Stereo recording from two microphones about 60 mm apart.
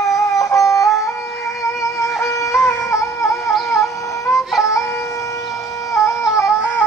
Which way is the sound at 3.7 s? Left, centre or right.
Left.